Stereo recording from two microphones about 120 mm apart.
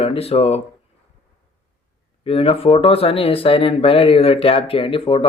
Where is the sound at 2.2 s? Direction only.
55° left (ahead or behind).